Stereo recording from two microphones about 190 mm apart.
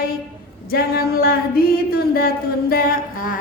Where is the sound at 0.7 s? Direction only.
50° left (ahead or behind).